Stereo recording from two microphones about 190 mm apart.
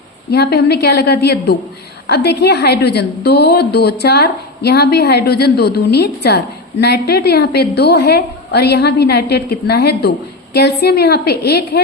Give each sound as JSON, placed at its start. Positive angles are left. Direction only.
{"t": 0.3, "sound": "a woman's voice", "side_deg": 55}